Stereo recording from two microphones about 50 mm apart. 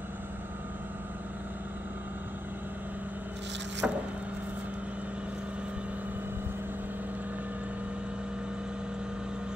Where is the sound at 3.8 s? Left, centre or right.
Right.